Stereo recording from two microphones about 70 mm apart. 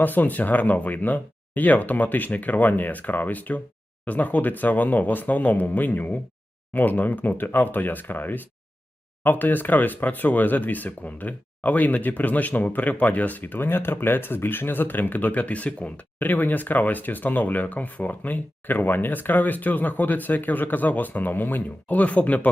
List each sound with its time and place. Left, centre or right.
0.0 s speech: left